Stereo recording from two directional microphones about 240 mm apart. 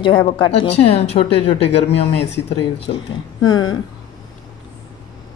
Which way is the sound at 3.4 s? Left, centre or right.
Centre.